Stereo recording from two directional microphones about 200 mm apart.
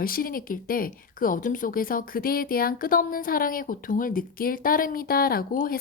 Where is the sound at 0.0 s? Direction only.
45° left (ahead or behind).